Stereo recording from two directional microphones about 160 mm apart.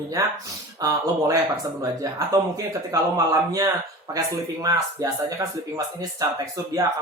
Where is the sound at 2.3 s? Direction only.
20° right (ahead or behind).